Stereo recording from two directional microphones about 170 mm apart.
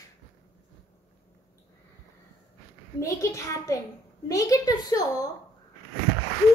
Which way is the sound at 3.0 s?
20° left (ahead or behind).